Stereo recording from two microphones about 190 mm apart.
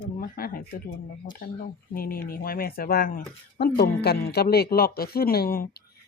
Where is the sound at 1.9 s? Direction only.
50° left (ahead or behind).